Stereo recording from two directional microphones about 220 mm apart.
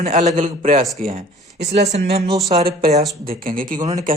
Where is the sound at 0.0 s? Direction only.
30° right (ahead or behind).